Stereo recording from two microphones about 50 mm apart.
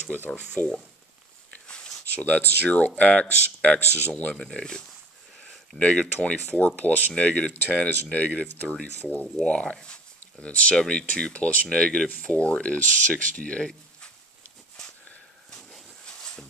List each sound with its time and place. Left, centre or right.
0.6 s speech: left
2.1 s speech: left; by 12.4 s centre
12.4 s speech: left
16.1 s a sound: centre